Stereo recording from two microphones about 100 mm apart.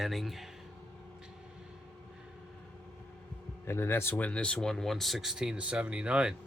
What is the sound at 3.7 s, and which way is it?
Speech, 25° left (ahead or behind).